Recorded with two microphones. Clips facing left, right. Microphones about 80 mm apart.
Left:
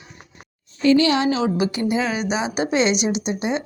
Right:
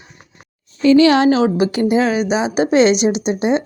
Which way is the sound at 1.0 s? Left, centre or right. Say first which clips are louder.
Right 7 dB; right.